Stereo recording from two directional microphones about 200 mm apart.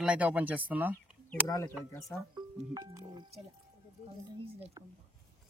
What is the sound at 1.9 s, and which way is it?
Speech, 15° left (ahead or behind).